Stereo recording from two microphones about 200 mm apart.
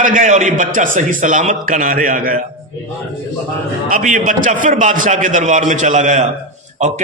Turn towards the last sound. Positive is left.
turn(degrees=-35)  # may be behind; listen again after turning